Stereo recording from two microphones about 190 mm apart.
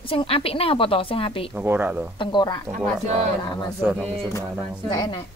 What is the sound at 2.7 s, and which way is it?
Speech, 35° right (ahead or behind).